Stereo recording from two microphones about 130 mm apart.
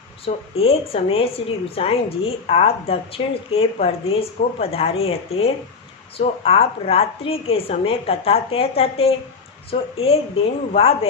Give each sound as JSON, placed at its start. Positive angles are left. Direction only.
{"t": 0.3, "sound": "a woman's voice", "side_deg": 50}